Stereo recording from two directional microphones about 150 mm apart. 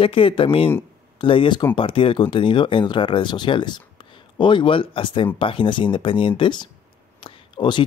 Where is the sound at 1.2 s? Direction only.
35° left (ahead or behind).